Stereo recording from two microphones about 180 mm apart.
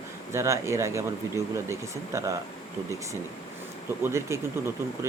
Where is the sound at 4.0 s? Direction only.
15° right (ahead or behind).